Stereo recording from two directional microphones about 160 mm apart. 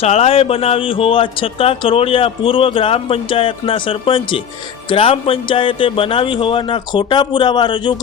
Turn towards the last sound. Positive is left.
turn(degrees=30)  # may be behind; listen again after turning